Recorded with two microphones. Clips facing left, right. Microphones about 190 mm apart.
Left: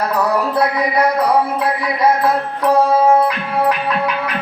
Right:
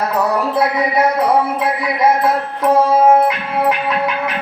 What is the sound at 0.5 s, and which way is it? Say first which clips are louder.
A man's voice: right 1 dB; 20° right (ahead or behind).